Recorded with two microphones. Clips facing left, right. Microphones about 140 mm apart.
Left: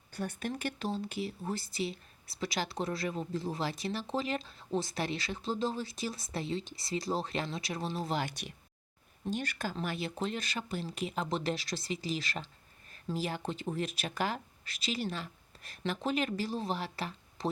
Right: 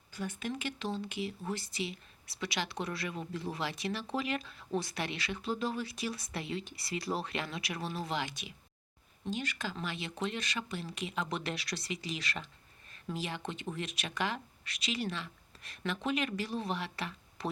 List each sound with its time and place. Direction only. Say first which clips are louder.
0.2 s speech: left 2 dB; 45° left (ahead or behind)